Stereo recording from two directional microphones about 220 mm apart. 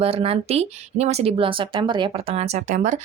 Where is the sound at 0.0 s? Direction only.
25° right (ahead or behind).